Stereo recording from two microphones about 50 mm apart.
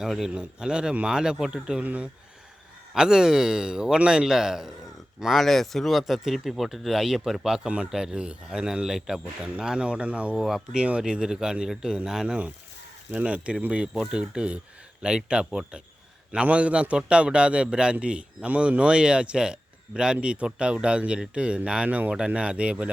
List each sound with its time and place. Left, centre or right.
0.3 s speech: centre
1.8 s speech: right
2.9 s speech: centre
5.2 s speech: centre
9.6 s speech: centre
10.3 s speech: centre
10.8 s speech: right
13.1 s speech: right
13.9 s speech: centre